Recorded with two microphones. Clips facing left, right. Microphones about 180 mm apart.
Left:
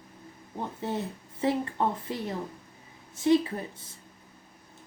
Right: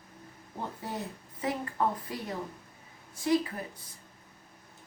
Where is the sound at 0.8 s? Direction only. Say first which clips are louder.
Left 5 dB; 25° left (ahead or behind).